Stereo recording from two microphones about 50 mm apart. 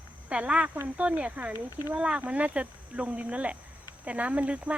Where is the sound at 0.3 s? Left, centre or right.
Right.